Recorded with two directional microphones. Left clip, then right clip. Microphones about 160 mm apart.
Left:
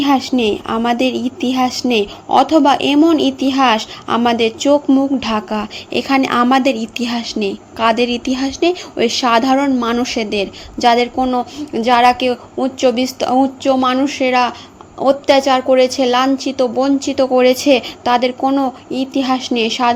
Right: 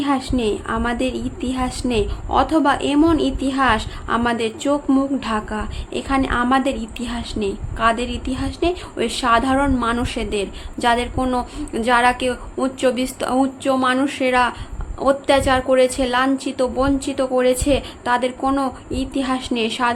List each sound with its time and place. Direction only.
0.0 s a woman's voice: 30° left (ahead or behind)